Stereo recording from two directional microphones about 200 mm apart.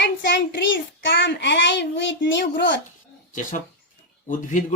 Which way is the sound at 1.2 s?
60° left (ahead or behind).